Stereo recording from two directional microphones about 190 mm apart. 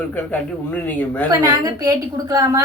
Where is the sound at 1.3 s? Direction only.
20° right (ahead or behind).